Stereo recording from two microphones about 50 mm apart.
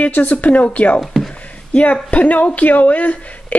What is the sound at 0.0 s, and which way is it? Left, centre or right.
A woman's voice, left.